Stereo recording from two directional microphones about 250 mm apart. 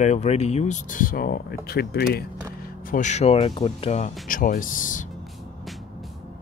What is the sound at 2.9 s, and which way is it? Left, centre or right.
Speech, left.